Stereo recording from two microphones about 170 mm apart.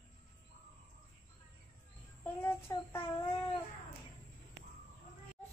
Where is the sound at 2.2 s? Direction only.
10° left (ahead or behind).